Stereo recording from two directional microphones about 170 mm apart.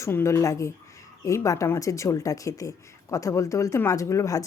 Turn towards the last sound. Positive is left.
turn(degrees=20)  # may be behind; listen again after turning